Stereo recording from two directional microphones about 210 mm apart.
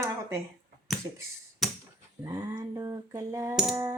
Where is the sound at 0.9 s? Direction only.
Centre (ahead or behind).